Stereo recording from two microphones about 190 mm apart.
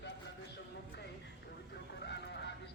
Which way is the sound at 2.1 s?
65° left (ahead or behind).